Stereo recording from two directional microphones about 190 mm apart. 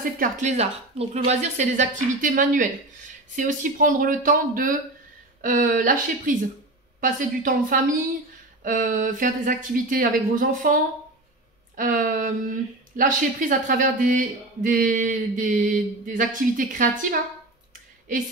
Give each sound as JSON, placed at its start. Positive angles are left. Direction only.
{"t": 0.2, "sound": "speech", "side_deg": -40}